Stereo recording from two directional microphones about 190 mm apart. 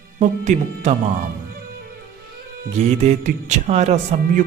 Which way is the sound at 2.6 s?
40° right (ahead or behind).